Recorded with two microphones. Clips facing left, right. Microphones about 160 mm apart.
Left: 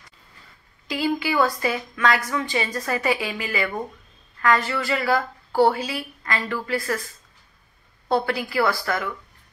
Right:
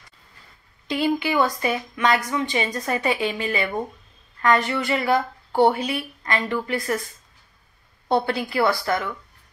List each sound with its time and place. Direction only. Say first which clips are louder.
0.8 s a woman's voice: right 2 dB; 25° right (ahead or behind)
8.1 s a woman's voice: right 1 dB; 25° right (ahead or behind)